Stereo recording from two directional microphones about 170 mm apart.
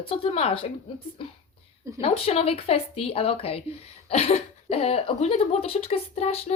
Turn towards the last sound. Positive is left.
turn(degrees=40)  # may be behind; listen again after turning